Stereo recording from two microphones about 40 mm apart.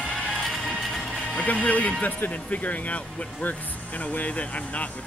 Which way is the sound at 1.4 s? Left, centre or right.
Left.